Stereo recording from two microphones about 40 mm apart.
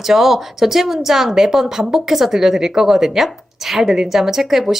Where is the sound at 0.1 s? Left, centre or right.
Centre.